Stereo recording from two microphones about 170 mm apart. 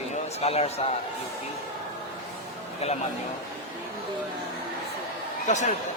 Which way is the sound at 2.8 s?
40° left (ahead or behind).